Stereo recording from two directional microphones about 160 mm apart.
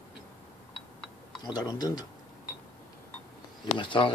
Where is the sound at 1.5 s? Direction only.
25° left (ahead or behind).